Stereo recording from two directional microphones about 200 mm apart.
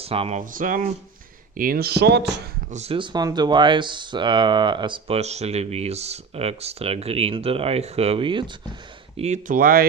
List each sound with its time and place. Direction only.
0.0 s speech: 30° right (ahead or behind)
0.6 s speech: 40° right (ahead or behind)
2.7 s speech: 30° right (ahead or behind)